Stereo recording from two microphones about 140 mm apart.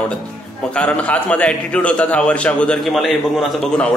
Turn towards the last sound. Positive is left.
turn(degrees=0)  # may be behind; listen again after turning